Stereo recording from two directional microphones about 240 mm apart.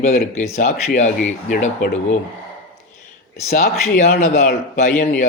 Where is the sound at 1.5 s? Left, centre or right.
Left.